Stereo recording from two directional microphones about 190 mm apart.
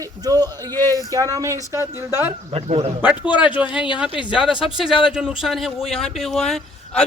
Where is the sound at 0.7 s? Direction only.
15° left (ahead or behind).